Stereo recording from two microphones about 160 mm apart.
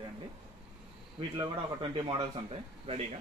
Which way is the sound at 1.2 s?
30° right (ahead or behind).